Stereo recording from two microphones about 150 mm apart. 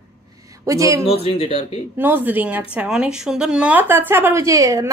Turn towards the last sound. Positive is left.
turn(degrees=-20)  # may be behind; listen again after turning